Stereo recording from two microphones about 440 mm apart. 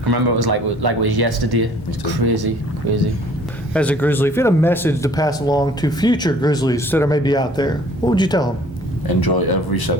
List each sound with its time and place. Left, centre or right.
0.0 s speech: right
3.8 s speech: centre
9.0 s speech: left